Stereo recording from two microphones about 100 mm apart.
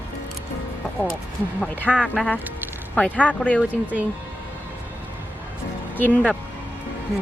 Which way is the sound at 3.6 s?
15° right (ahead or behind).